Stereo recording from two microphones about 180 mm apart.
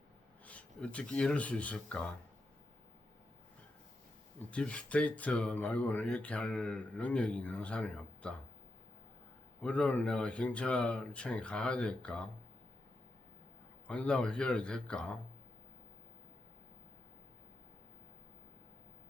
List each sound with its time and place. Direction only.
0.4 s speech: 10° left (ahead or behind)
4.5 s speech: 5° left (ahead or behind)
9.6 s speech: 5° left (ahead or behind)
13.8 s a man's voice: 5° left (ahead or behind)